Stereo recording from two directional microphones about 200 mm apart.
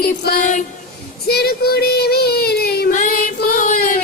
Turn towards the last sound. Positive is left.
turn(degrees=45)  # may be behind; listen again after turning